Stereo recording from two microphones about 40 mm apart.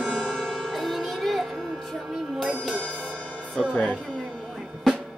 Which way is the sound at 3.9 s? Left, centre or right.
Centre.